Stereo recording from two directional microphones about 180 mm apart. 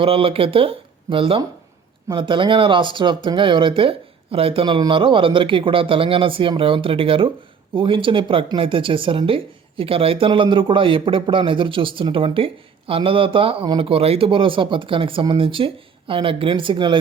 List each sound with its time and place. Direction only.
0.0 s speech: 30° right (ahead or behind)